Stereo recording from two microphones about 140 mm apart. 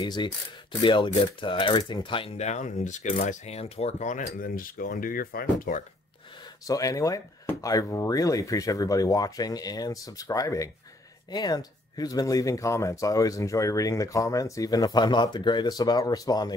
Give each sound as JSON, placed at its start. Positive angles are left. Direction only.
{"t": 0.0, "sound": "speech", "side_deg": 35}
{"t": 6.6, "sound": "speech", "side_deg": 25}